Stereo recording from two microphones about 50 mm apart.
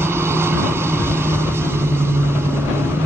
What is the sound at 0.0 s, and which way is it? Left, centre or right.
Vehicle, right.